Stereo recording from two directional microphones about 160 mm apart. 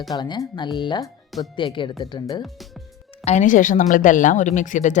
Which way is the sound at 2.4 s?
Centre (ahead or behind).